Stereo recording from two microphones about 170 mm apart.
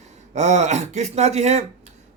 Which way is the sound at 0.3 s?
40° right (ahead or behind).